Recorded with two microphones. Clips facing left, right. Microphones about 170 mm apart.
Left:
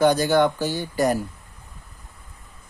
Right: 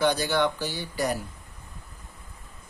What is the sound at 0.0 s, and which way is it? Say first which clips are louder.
Speech: left 6 dB; 45° left (ahead or behind).